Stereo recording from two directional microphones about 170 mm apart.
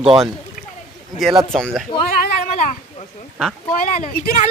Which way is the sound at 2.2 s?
55° left (ahead or behind).